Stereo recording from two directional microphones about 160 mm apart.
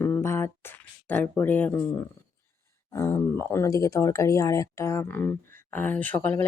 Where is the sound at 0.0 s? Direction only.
15° left (ahead or behind).